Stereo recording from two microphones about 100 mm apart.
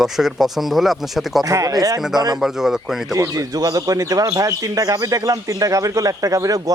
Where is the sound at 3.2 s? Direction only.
30° right (ahead or behind).